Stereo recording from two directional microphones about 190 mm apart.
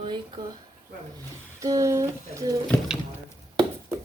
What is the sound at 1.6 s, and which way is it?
A woman's voice, 15° right (ahead or behind).